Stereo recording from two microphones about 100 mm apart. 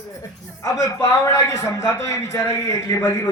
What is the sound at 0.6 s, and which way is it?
A man's voice, 35° left (ahead or behind).